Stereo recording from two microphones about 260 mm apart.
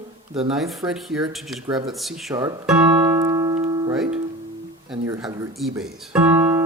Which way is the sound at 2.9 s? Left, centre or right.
Centre.